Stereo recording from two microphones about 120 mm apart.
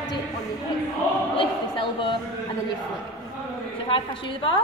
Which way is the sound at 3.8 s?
45° left (ahead or behind).